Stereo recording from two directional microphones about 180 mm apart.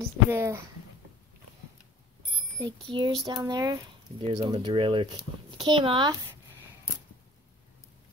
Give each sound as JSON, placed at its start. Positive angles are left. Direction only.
{"t": 0.3, "sound": "speech", "side_deg": -15}
{"t": 2.6, "sound": "speech", "side_deg": -25}